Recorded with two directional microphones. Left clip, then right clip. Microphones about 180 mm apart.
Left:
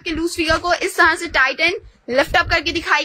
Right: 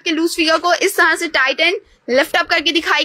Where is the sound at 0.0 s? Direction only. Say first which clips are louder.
Right 5 dB; 25° right (ahead or behind).